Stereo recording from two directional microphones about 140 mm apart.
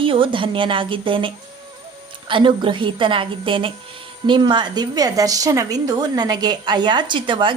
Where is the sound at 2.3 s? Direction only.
35° right (ahead or behind).